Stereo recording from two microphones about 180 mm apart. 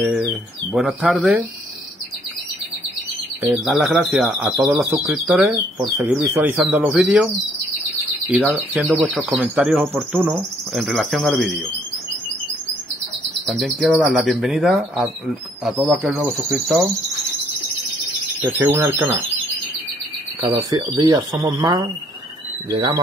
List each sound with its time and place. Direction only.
0.7 s speech: centre (ahead or behind)
3.4 s speech: 5° right (ahead or behind)
8.3 s speech: 10° right (ahead or behind)
13.5 s speech: centre (ahead or behind)
18.4 s speech: 10° right (ahead or behind)
20.4 s speech: 20° right (ahead or behind)